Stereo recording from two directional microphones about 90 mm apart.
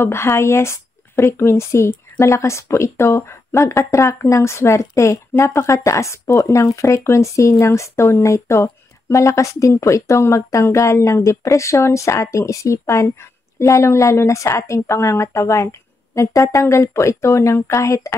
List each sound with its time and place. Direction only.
0.0 s speech: 30° left (ahead or behind)